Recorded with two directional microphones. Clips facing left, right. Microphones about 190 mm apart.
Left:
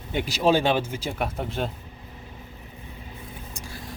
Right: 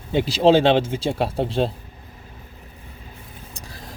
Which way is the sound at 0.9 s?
30° right (ahead or behind).